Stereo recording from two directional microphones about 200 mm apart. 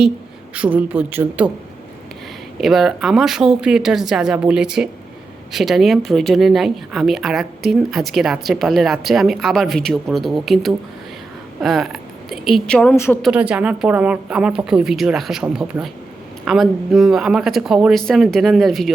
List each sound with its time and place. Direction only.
0.5 s a man's voice: 5° right (ahead or behind)
2.6 s speech: centre (ahead or behind)
13.2 s speech: 5° right (ahead or behind)